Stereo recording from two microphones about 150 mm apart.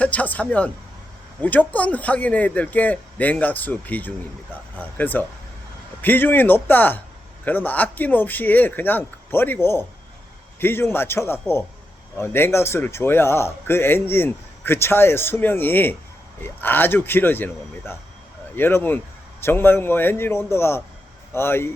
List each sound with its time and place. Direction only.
0.0 s speech: 10° left (ahead or behind)